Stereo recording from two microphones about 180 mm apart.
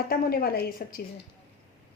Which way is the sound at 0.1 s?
55° left (ahead or behind).